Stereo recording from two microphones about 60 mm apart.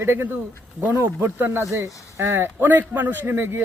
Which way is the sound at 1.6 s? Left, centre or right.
Right.